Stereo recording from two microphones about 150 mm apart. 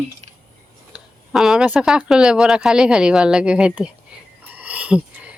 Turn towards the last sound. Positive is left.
turn(degrees=-10)  # may be behind; listen again after turning